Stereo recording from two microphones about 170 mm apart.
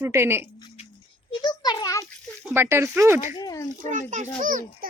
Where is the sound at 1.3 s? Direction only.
25° left (ahead or behind).